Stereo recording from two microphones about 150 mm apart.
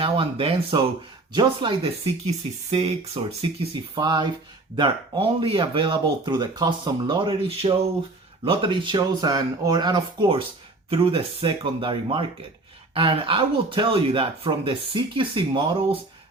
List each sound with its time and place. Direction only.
0.0 s speech: 35° right (ahead or behind)
3.9 s speech: 30° right (ahead or behind)